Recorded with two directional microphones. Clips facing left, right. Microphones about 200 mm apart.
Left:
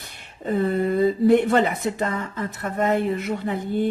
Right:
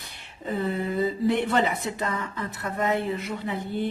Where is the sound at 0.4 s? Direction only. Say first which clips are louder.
Left 6 dB; 50° left (ahead or behind).